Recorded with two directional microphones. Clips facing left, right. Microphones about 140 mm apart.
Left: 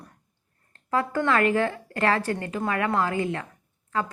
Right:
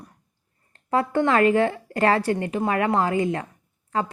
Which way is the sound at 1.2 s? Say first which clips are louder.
Right 4 dB; 20° right (ahead or behind).